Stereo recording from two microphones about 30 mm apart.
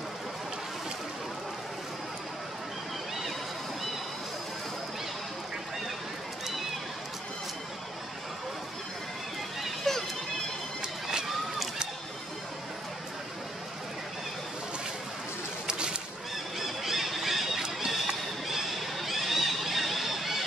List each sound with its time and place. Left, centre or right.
9.9 s music: centre
10.8 s music: right
16.5 s squeal: centre
17.7 s music: centre
18.5 s a sound: centre